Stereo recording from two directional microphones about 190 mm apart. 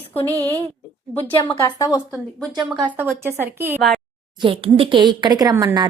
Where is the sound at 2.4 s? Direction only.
Centre (ahead or behind).